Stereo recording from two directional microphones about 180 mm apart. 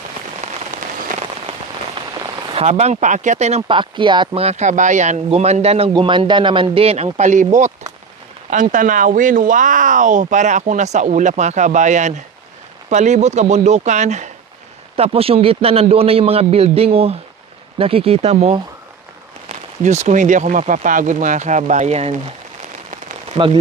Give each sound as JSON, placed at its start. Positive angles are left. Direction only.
{"t": 0.4, "sound": "rain on surface", "side_deg": -40}
{"t": 2.0, "sound": "rain on surface", "side_deg": -25}
{"t": 2.6, "sound": "speech", "side_deg": -35}
{"t": 22.9, "sound": "rain on surface", "side_deg": -30}